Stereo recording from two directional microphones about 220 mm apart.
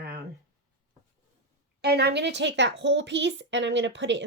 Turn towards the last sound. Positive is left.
turn(degrees=-55)  # may be behind; listen again after turning